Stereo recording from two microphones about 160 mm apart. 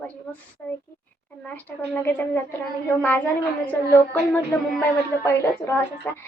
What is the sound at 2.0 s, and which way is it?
Speech, 10° left (ahead or behind).